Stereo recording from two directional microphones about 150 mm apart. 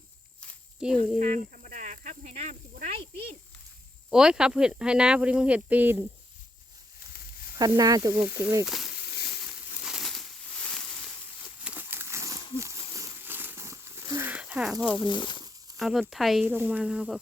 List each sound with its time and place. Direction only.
0.8 s speech: 5° right (ahead or behind)
1.2 s speech: 60° right (ahead or behind)
4.1 s speech: 5° right (ahead or behind)
7.8 s speech: 25° right (ahead or behind)
8.2 s speech: 15° right (ahead or behind)
8.6 s snake: centre (ahead or behind)
9.0 s a sound: 90° left
9.8 s crumpling: centre (ahead or behind)
11.6 s a sound: 10° right (ahead or behind)
15.0 s speech: 30° left (ahead or behind)
15.8 s speech: centre (ahead or behind)
16.4 s speech: 10° right (ahead or behind)